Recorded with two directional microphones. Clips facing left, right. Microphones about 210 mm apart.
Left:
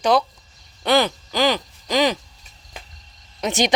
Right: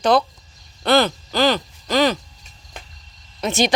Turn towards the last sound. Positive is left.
turn(degrees=15)  # may be behind; listen again after turning